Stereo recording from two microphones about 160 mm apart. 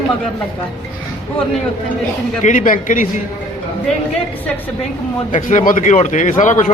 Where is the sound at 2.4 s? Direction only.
55° left (ahead or behind).